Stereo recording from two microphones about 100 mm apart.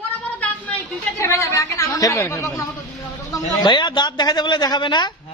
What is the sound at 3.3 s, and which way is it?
A man's voice, 45° left (ahead or behind).